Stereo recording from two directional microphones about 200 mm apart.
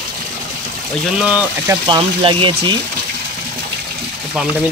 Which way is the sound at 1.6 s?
20° right (ahead or behind).